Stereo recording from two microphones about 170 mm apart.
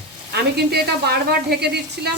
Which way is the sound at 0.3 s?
70° right (ahead or behind).